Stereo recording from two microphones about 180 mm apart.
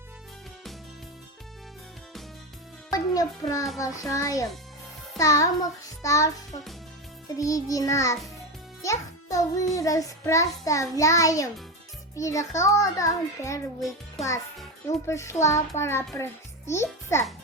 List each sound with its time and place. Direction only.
2.9 s a child's voice: 20° left (ahead or behind)
3.8 s child singing: 20° left (ahead or behind)
8.8 s a child's voice: 20° left (ahead or behind)
9.7 s child singing: 20° left (ahead or behind)
15.0 s child singing: 15° left (ahead or behind)
16.1 s a child's voice: 15° left (ahead or behind)